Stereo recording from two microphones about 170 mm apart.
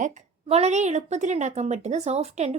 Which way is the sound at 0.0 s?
40° right (ahead or behind).